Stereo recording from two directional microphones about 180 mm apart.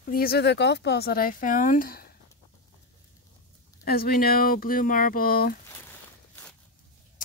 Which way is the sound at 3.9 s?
55° left (ahead or behind).